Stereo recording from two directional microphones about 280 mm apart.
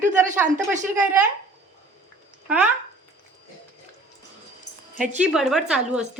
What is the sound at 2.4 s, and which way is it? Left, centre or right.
Speech, centre.